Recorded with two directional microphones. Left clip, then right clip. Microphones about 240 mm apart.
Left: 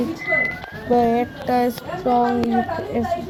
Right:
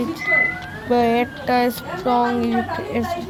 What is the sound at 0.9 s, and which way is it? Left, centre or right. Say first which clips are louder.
Speech: even; centre.